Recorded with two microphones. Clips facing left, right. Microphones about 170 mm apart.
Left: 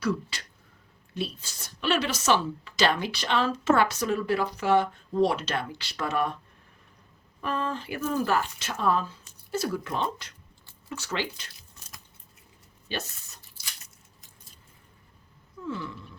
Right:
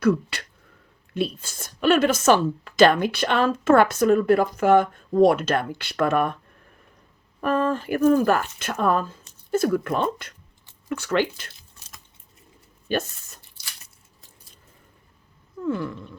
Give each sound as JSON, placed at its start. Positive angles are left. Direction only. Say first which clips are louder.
{"t": 0.0, "sound": "speech", "louder": "right 8 dB", "side_deg": -55}
{"t": 7.4, "sound": "speech", "louder": "right 8 dB", "side_deg": -50}
{"t": 12.9, "sound": "speech", "louder": "right 9 dB", "side_deg": -50}
{"t": 15.6, "sound": "speech", "louder": "right 8 dB", "side_deg": -55}